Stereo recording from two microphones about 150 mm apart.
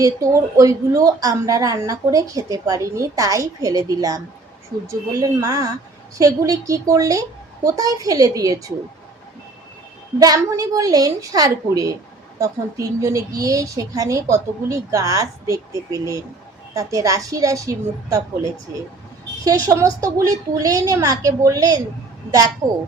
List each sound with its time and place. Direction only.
0.0 s a woman's voice: 20° right (ahead or behind)
10.2 s a woman's voice: 25° right (ahead or behind)
19.5 s a woman's voice: 25° right (ahead or behind)